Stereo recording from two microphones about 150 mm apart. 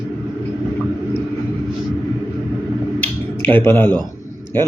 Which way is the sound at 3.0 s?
10° left (ahead or behind).